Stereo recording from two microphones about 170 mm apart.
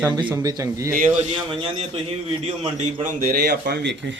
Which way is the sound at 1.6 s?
35° right (ahead or behind).